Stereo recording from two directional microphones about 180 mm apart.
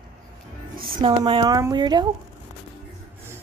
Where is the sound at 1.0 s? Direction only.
25° right (ahead or behind).